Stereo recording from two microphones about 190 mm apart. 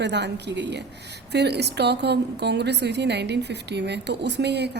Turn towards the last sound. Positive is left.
turn(degrees=-65)  # may be behind; listen again after turning